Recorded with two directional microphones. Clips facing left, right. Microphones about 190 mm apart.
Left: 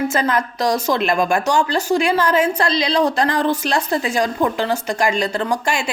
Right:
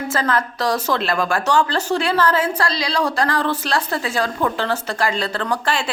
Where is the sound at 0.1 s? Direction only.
15° left (ahead or behind).